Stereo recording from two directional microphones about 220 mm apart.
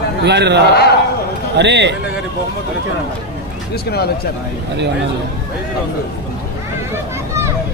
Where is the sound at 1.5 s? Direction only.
50° right (ahead or behind).